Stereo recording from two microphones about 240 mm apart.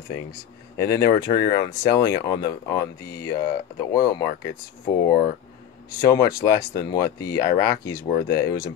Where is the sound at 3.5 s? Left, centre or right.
Centre.